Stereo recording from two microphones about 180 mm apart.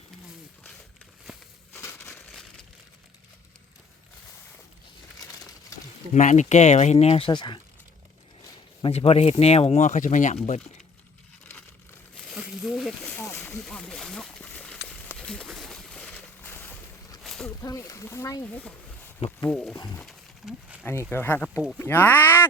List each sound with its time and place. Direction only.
1.3 s a sound: centre (ahead or behind)
2.0 s crumpling: centre (ahead or behind)
5.2 s crushing: 20° left (ahead or behind)
6.1 s speech: 40° left (ahead or behind); by 7.6 s 25° left (ahead or behind)
8.8 s speech: 35° left (ahead or behind)
12.3 s a sound: 5° right (ahead or behind)
13.1 s a sound: 10° left (ahead or behind)
17.6 s speech: 15° left (ahead or behind)
20.0 s wild animals: centre (ahead or behind)
20.8 s speech: 15° left (ahead or behind)